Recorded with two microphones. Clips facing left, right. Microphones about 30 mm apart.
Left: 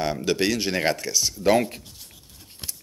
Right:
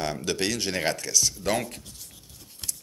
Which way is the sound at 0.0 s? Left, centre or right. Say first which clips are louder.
Left 4 dB; centre.